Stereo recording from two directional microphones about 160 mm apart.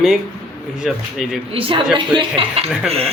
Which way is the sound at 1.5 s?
35° right (ahead or behind).